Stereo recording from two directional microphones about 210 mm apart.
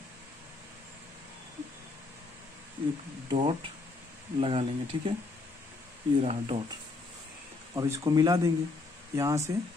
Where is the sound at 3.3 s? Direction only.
25° right (ahead or behind).